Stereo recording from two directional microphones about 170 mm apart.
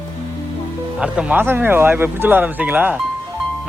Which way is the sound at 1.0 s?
5° right (ahead or behind).